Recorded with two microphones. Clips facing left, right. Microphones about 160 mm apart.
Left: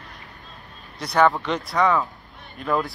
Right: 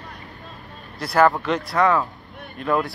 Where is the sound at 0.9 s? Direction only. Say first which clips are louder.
Right 1 dB; centre (ahead or behind).